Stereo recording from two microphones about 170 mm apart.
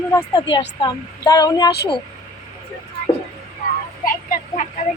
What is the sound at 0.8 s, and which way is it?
Speech, 20° left (ahead or behind).